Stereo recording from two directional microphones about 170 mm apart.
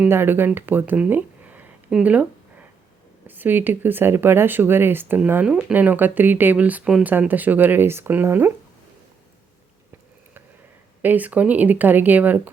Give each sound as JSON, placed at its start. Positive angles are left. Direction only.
{"t": 0.0, "sound": "speech", "side_deg": -15}
{"t": 11.0, "sound": "speech", "side_deg": -10}